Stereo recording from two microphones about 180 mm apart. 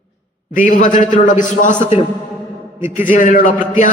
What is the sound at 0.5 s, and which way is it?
A man's voice, 45° left (ahead or behind).